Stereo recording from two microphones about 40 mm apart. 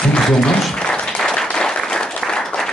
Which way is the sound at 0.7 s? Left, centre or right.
Left.